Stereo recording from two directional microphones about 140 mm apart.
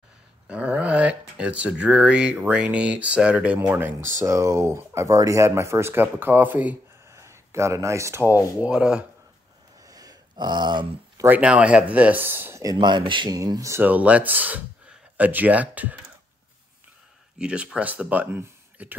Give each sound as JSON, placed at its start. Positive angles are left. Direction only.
{"t": 0.5, "sound": "speech", "side_deg": -10}
{"t": 9.8, "sound": "a sound", "side_deg": -25}
{"t": 11.2, "sound": "speech", "side_deg": -10}
{"t": 12.7, "sound": "speech", "side_deg": -35}
{"t": 17.4, "sound": "speech", "side_deg": -5}